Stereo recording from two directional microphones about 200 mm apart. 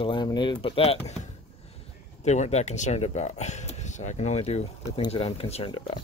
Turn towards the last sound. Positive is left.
turn(degrees=25)  # may be behind; listen again after turning